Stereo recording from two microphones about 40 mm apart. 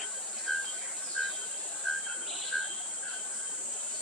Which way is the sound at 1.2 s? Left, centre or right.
Centre.